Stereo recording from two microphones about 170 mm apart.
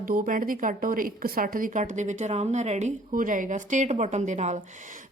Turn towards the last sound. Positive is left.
turn(degrees=-45)  # may be behind; listen again after turning